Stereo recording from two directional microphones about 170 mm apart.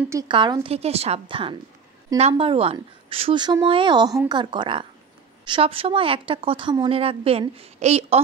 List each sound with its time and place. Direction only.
0.1 s a woman's voice: 25° right (ahead or behind); by 8.2 s 40° right (ahead or behind)